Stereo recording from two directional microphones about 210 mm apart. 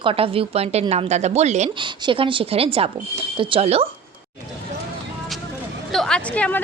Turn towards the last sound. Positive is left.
turn(degrees=5)  # may be behind; listen again after turning